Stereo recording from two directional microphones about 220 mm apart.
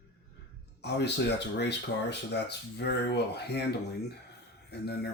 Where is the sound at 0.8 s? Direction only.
50° left (ahead or behind).